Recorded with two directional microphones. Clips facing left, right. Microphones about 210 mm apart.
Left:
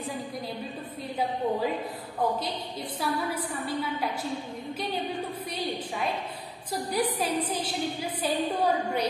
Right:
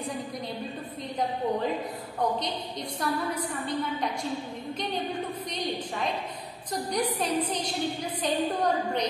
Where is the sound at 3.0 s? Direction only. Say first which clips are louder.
Even; 5° left (ahead or behind).